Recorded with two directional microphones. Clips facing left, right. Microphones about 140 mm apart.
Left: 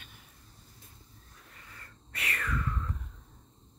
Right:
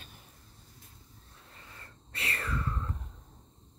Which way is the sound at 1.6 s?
25° right (ahead or behind).